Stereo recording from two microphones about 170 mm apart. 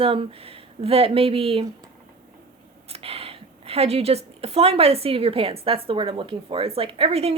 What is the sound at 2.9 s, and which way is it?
A woman's voice, 35° right (ahead or behind).